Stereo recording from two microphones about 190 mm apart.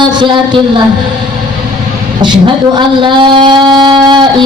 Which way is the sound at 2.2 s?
25° right (ahead or behind).